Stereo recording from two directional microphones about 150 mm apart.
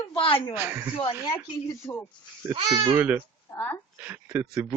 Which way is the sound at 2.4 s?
15° right (ahead or behind).